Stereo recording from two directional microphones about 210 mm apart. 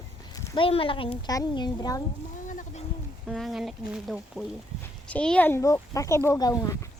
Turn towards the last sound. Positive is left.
turn(degrees=15)  # may be behind; listen again after turning